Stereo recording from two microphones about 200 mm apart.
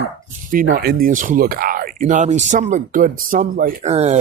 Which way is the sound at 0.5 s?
45° right (ahead or behind).